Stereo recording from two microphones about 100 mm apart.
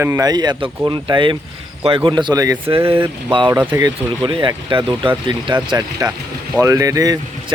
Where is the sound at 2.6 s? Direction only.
65° right (ahead or behind).